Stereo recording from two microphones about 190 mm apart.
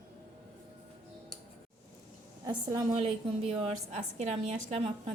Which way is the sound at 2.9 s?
30° right (ahead or behind).